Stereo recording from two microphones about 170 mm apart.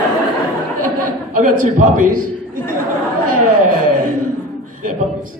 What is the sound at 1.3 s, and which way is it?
Speech, 50° right (ahead or behind).